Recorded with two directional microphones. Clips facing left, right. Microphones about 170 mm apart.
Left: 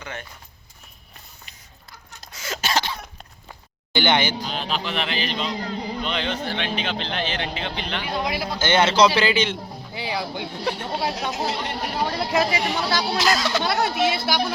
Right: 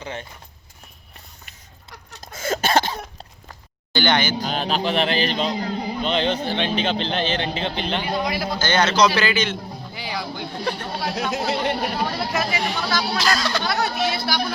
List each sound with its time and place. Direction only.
0.0 s speech: 30° right (ahead or behind)
2.2 s a sound: 50° right (ahead or behind)
3.9 s a woman's voice: 20° left (ahead or behind)
4.4 s speech: 45° right (ahead or behind)
8.2 s a man's voice: 25° left (ahead or behind)
10.4 s speech: 5° left (ahead or behind)
10.8 s a woman's voice: 20° left (ahead or behind)
11.3 s speech: 65° right (ahead or behind)
12.2 s a woman's voice: 20° left (ahead or behind)